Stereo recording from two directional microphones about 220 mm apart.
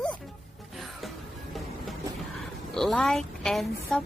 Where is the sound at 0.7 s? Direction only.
Centre (ahead or behind).